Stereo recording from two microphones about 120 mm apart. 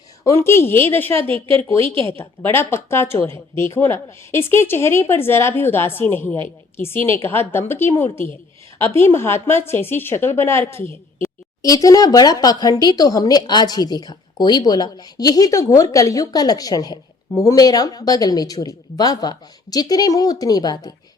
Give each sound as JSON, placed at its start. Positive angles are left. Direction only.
{"t": 0.3, "sound": "a woman's voice", "side_deg": 20}